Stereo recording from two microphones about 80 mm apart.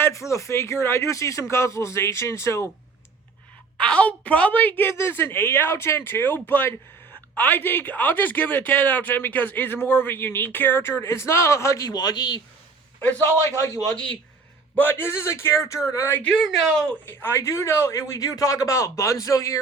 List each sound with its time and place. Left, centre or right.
0.0 s speech: left
3.8 s speech: centre; by 11.9 s left
11.9 s a man's voice: left
13.1 s a man's voice: centre
14.8 s speech: left